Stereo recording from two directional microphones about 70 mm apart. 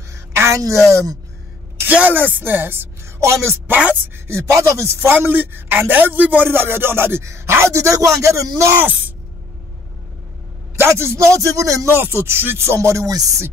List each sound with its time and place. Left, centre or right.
0.1 s a sound: right
0.6 s a woman's voice: right
1.8 s speech: right
4.3 s speech: right
5.3 s speech: right
10.8 s speech: right
11.9 s speech: right
12.7 s speech: right